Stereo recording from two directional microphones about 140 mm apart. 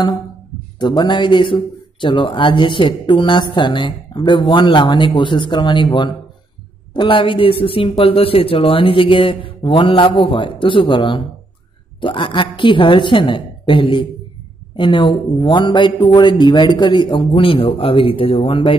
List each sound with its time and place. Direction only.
0.7 s speech: 30° left (ahead or behind)
6.9 s speech: 35° left (ahead or behind)